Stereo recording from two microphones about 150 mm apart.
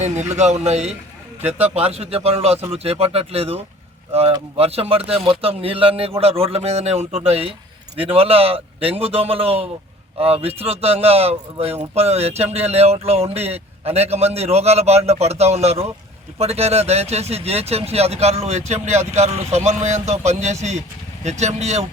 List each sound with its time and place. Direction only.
0.0 s speech: 50° right (ahead or behind)
1.4 s speech: 10° right (ahead or behind)
1.9 s speech: 45° right (ahead or behind)